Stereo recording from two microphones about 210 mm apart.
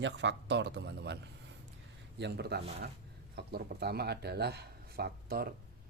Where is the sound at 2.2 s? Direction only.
50° right (ahead or behind).